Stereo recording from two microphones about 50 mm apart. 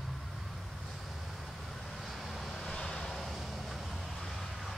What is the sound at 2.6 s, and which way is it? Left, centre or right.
Vehicle, centre.